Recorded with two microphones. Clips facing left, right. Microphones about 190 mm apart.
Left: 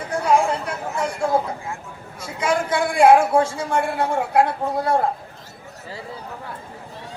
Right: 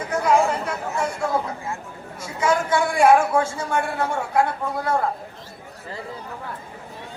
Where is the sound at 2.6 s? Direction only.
30° left (ahead or behind).